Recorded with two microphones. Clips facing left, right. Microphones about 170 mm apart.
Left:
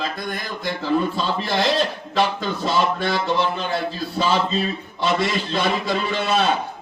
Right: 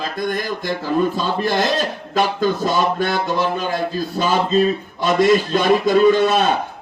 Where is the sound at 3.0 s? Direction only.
45° right (ahead or behind).